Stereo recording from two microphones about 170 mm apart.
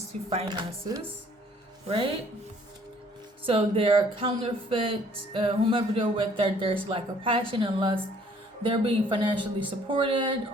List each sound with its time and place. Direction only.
0.3 s speech: 30° right (ahead or behind)
3.4 s speech: 35° right (ahead or behind)